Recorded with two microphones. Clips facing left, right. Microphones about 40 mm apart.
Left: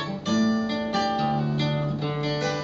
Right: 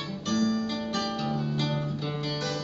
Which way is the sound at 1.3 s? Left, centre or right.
Left.